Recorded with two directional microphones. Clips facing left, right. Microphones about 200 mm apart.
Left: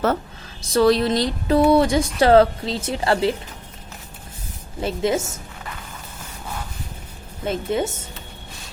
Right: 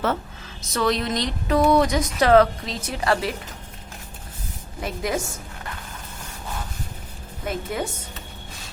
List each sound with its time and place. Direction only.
0.7 s a sound: 35° left (ahead or behind)
1.7 s a woman's voice: 30° left (ahead or behind)
4.8 s a woman's voice: 25° left (ahead or behind)
7.4 s a woman's voice: 25° left (ahead or behind)